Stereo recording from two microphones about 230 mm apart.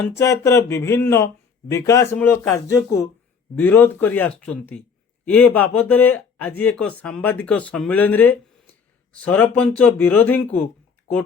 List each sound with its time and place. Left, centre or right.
0.2 s speech: centre